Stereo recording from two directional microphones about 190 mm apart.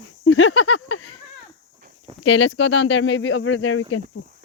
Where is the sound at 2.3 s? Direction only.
75° left (ahead or behind); by 4.0 s 90° left.